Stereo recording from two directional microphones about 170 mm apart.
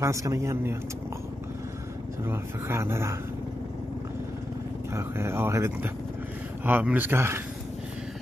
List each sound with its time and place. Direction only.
0.0 s speech: 20° right (ahead or behind)
2.2 s speech: 15° right (ahead or behind)
4.9 s speech: 15° right (ahead or behind)